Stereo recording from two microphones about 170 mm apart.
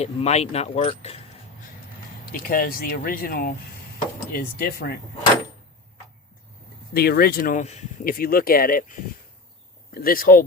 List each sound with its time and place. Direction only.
0.0 s speech: 40° left (ahead or behind)
2.2 s speech: 55° left (ahead or behind)
6.9 s speech: 65° left (ahead or behind); by 7.9 s 45° left (ahead or behind)
8.0 s speech: 60° left (ahead or behind)